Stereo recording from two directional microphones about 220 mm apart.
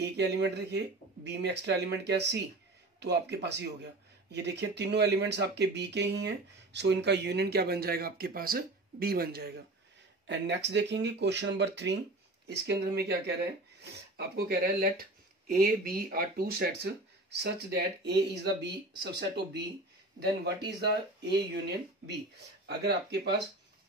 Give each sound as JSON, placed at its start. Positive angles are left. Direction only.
{"t": 0.0, "sound": "speech", "side_deg": -50}